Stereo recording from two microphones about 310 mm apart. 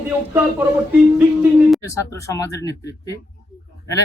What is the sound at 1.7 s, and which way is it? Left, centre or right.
Speech, centre.